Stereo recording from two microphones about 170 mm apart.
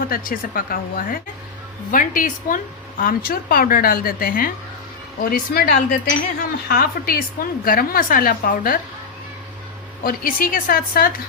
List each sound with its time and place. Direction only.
0.1 s a woman's voice: 55° left (ahead or behind)
10.0 s a woman's voice: 55° left (ahead or behind)